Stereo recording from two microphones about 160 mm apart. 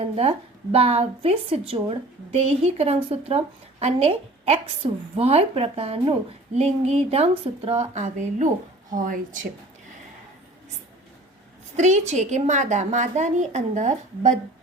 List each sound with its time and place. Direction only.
0.0 s a woman's voice: 40° right (ahead or behind); by 9.5 s 55° right (ahead or behind)
11.8 s a woman's voice: 45° right (ahead or behind)